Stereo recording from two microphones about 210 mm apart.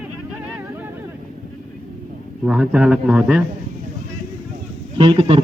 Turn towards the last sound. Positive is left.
turn(degrees=-25)  # may be behind; listen again after turning